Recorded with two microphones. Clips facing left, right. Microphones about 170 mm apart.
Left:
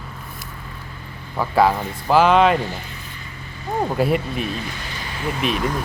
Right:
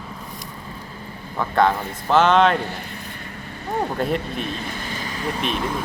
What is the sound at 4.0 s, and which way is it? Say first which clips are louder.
Speech: left 3 dB; 5° left (ahead or behind).